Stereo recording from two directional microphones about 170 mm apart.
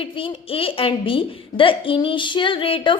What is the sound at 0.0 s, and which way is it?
A child's voice, 30° left (ahead or behind).